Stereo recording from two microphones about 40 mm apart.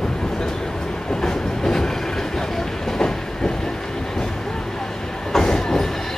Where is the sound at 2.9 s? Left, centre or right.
Centre.